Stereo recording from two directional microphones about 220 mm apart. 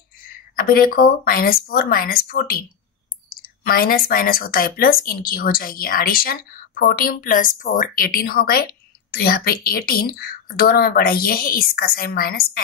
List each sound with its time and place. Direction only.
0.6 s speech: 40° left (ahead or behind)